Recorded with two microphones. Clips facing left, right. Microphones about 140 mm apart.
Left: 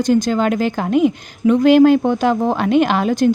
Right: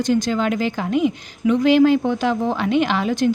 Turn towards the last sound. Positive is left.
turn(degrees=45)  # may be behind; listen again after turning